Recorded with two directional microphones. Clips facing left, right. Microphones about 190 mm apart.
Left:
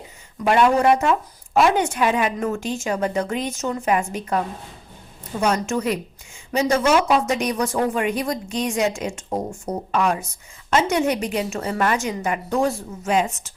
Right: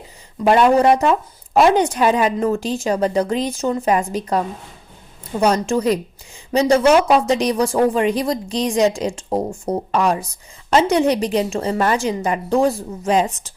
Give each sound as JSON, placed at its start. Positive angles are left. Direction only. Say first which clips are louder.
{"t": 0.4, "sound": "speech", "louder": "right 3 dB", "side_deg": -30}
{"t": 5.4, "sound": "speech", "louder": "right 4 dB", "side_deg": -35}